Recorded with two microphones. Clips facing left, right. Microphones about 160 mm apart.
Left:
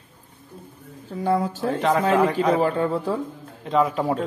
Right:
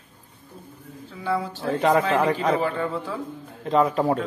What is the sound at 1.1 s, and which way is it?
Speech, 45° left (ahead or behind).